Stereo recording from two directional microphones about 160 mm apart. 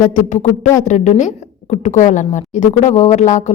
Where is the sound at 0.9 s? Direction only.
50° left (ahead or behind).